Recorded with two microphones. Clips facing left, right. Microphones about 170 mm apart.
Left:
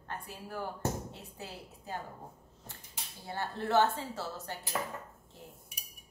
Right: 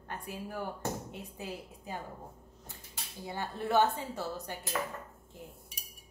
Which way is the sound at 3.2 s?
15° right (ahead or behind).